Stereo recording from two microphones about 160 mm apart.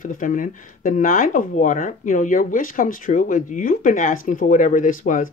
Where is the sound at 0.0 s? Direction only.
55° left (ahead or behind).